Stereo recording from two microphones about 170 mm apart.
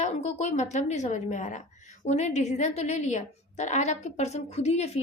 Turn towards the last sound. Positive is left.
turn(degrees=40)  # may be behind; listen again after turning